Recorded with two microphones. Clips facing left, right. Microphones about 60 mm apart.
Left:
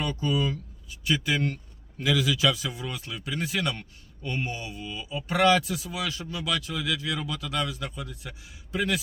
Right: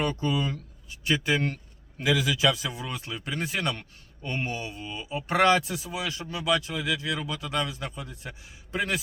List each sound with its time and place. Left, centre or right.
0.0 s a man's voice: right
2.0 s a man's voice: right